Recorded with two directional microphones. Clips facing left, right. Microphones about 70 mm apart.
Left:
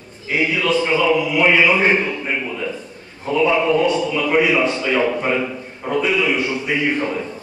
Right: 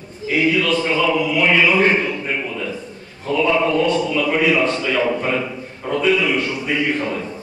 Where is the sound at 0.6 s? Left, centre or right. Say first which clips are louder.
Left 1 dB; centre.